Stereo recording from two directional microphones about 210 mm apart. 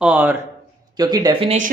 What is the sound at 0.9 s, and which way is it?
Speech, 20° right (ahead or behind).